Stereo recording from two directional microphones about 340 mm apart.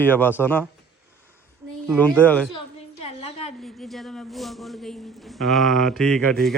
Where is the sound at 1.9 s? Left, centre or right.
Centre.